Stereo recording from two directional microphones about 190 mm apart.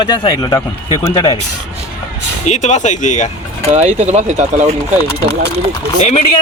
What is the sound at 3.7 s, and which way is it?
Speech, 35° right (ahead or behind).